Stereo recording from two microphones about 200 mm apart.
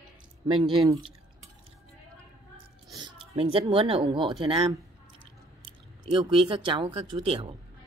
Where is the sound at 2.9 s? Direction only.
30° right (ahead or behind).